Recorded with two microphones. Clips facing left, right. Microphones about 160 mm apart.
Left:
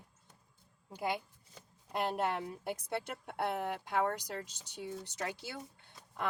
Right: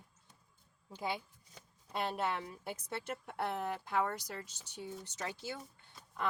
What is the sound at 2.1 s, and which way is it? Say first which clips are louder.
Speech: left 2 dB; 50° left (ahead or behind).